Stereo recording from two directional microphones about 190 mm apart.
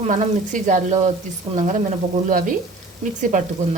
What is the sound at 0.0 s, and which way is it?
Speech, 40° right (ahead or behind).